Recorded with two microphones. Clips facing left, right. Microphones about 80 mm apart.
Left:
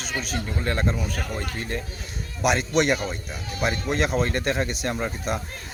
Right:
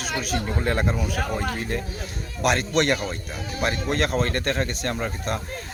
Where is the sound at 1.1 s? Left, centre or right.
Right.